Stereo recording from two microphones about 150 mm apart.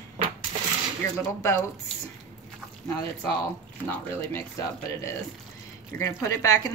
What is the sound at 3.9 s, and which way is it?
Speech, 15° left (ahead or behind).